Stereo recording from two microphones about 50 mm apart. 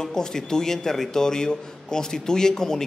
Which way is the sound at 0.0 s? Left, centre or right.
Centre.